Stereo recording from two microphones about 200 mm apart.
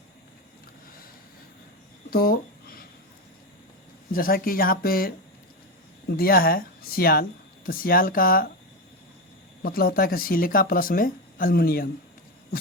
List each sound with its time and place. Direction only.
2.0 s a sound: 50° left (ahead or behind)
4.1 s speech: 45° left (ahead or behind)
9.6 s speech: 50° left (ahead or behind)